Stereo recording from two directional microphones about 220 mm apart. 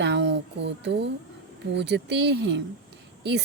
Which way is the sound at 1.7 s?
50° right (ahead or behind).